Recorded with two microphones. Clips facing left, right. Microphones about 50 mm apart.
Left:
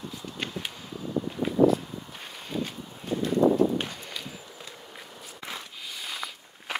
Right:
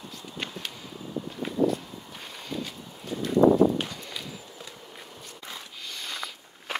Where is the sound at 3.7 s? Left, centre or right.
Left.